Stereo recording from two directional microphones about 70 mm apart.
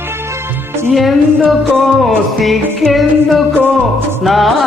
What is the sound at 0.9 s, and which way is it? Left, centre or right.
Music, centre.